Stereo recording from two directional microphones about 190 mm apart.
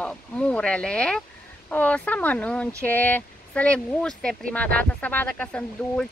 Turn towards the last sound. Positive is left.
turn(degrees=5)  # may be behind; listen again after turning